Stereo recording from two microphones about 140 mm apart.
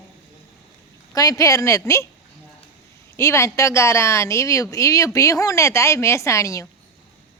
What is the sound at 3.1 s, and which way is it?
Speech, 20° left (ahead or behind).